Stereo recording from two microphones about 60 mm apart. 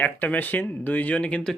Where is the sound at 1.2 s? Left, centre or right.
Centre.